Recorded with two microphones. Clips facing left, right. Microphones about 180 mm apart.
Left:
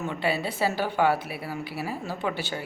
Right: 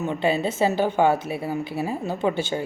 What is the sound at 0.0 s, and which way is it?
Speech, 20° right (ahead or behind).